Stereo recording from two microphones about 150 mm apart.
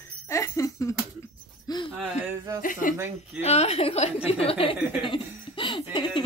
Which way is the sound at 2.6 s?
65° left (ahead or behind).